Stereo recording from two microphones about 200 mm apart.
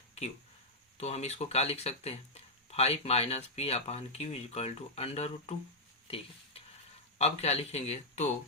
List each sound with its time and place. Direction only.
0.9 s speech: 30° left (ahead or behind)
6.1 s a sound: 30° left (ahead or behind)
7.2 s speech: 30° left (ahead or behind)